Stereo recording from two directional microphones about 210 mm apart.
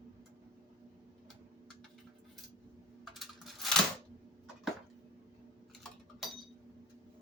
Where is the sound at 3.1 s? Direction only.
Centre (ahead or behind).